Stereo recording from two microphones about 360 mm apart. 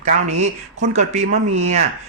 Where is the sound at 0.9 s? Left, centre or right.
Centre.